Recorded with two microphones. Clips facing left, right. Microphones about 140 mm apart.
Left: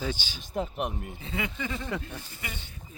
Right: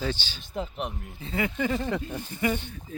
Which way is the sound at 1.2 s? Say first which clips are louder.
Right 5 dB; 35° right (ahead or behind).